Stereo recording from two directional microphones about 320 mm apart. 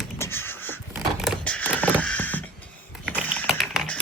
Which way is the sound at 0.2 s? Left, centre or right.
Centre.